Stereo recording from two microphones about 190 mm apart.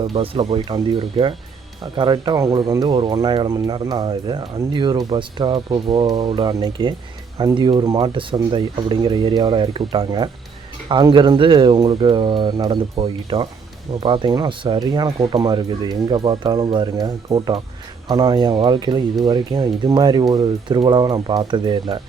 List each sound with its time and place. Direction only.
0.0 s speech: 25° right (ahead or behind)